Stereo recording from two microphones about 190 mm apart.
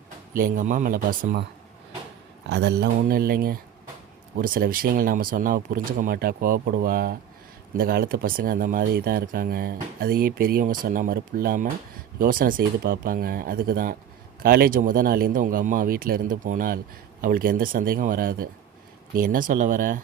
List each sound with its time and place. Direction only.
0.3 s speech: 45° right (ahead or behind)
2.5 s speech: 60° right (ahead or behind); by 20.0 s 45° right (ahead or behind)